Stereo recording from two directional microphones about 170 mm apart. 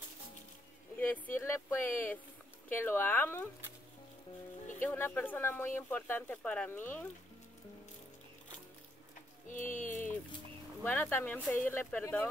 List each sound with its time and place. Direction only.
0.9 s speech: 10° left (ahead or behind)
4.8 s speech: 10° left (ahead or behind)
9.5 s a sound: 50° left (ahead or behind)
10.8 s speech: 10° left (ahead or behind)